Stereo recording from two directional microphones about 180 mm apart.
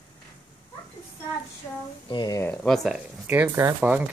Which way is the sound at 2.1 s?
25° left (ahead or behind).